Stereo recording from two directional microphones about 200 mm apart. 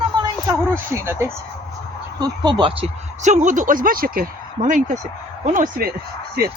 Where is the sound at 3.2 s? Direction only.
35° right (ahead or behind).